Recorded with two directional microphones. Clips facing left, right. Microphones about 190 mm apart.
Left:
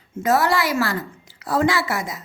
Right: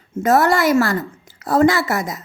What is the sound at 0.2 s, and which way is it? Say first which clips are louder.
A woman's voice: right 4 dB; 50° right (ahead or behind).